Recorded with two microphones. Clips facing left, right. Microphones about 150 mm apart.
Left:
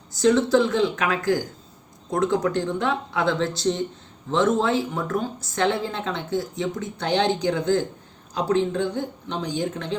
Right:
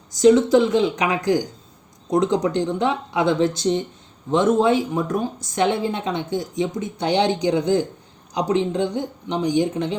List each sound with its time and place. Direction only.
0.1 s a woman's voice: 20° right (ahead or behind)